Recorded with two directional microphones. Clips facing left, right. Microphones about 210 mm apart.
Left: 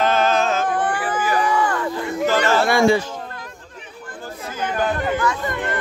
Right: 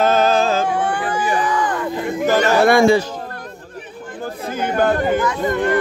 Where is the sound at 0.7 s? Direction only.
10° right (ahead or behind).